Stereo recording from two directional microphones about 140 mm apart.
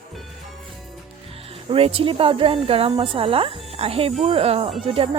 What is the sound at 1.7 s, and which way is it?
Speech, 40° right (ahead or behind).